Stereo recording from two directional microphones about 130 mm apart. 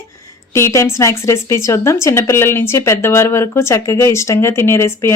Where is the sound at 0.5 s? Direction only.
20° left (ahead or behind).